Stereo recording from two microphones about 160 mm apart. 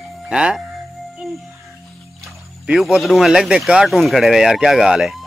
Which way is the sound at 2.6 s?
Centre (ahead or behind).